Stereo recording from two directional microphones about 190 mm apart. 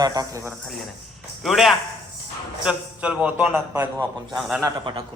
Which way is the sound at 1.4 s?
Centre (ahead or behind).